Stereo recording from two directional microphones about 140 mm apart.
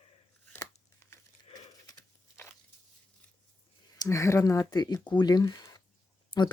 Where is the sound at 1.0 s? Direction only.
15° left (ahead or behind).